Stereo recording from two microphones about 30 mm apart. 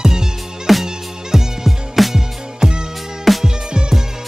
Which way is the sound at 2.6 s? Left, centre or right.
Centre.